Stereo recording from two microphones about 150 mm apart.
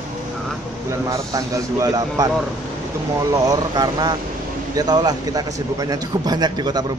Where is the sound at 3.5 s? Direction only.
25° right (ahead or behind).